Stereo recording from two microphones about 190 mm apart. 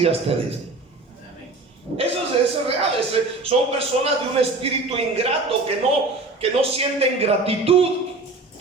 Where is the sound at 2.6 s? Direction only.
30° right (ahead or behind).